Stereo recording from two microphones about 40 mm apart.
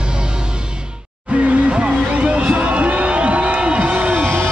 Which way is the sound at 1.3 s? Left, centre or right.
Right.